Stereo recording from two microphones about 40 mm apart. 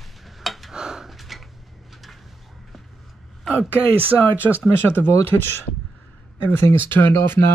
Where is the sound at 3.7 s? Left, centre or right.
Right.